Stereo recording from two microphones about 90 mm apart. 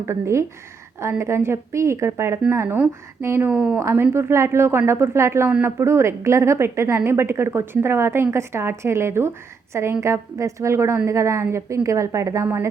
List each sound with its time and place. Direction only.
0.0 s a woman's voice: 30° right (ahead or behind)
3.5 s a woman's voice: 10° right (ahead or behind)
3.8 s a woman's voice: 30° right (ahead or behind)